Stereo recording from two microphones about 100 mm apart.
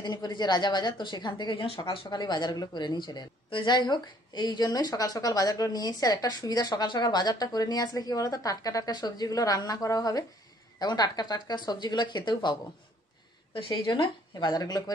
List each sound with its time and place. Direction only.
0.0 s a woman's voice: 45° left (ahead or behind)
13.9 s a woman's voice: 45° left (ahead or behind)